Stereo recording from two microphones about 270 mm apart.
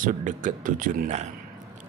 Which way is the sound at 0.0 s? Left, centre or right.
Right.